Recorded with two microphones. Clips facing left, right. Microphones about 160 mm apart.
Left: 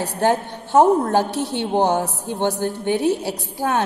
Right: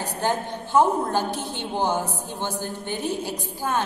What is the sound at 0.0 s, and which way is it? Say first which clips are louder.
A woman's voice: left 6 dB; 75° left (ahead or behind).